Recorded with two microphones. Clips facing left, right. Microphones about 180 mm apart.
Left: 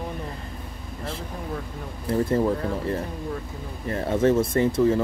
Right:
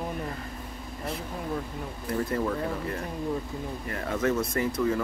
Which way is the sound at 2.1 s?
30° left (ahead or behind).